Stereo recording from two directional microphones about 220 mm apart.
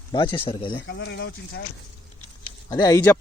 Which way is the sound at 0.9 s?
55° left (ahead or behind).